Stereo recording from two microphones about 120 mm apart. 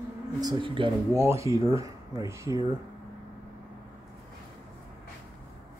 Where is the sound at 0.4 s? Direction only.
40° right (ahead or behind).